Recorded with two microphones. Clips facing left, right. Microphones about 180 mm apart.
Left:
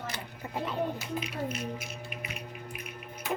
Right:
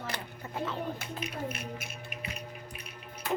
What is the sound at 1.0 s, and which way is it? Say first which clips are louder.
Speech: left 3 dB; 55° right (ahead or behind).